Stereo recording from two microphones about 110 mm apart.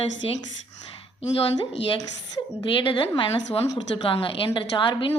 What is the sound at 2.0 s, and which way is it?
Speech, 35° left (ahead or behind).